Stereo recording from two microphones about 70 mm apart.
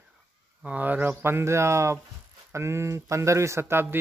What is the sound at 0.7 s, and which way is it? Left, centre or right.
A man's voice, right.